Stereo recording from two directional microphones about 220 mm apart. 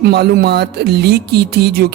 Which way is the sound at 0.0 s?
45° right (ahead or behind).